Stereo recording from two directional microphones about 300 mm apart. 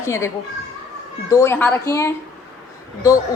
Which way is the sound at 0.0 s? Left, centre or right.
Centre.